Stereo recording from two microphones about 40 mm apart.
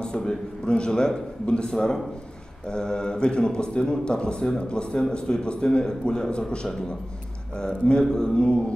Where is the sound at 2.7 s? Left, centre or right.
Centre.